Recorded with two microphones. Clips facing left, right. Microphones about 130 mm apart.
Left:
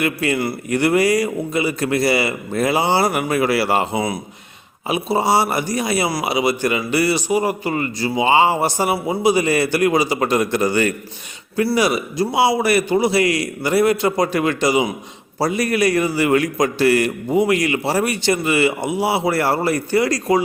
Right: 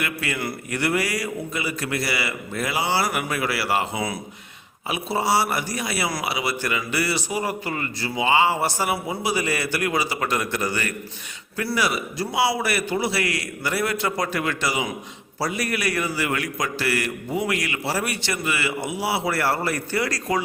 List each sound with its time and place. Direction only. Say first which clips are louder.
0.0 s a man's voice: left 8 dB; 30° left (ahead or behind)